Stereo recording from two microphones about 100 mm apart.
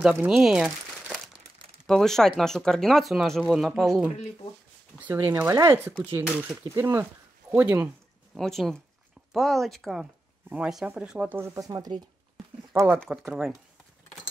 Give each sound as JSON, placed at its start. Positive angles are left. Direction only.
{"t": 0.3, "sound": "crumpling", "side_deg": -5}
{"t": 1.9, "sound": "speech", "side_deg": 5}
{"t": 4.9, "sound": "speech", "side_deg": -20}
{"t": 8.4, "sound": "speech", "side_deg": 5}
{"t": 11.5, "sound": "speech", "side_deg": -35}
{"t": 12.7, "sound": "speech", "side_deg": -20}
{"t": 13.3, "sound": "speech", "side_deg": -5}